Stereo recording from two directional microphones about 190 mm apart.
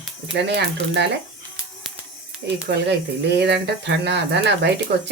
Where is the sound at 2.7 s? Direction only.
60° right (ahead or behind).